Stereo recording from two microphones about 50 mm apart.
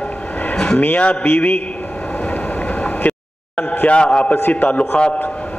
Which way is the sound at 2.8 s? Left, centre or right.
Left.